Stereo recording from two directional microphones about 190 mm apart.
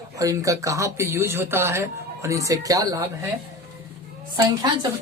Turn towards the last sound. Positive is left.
turn(degrees=-20)  # may be behind; listen again after turning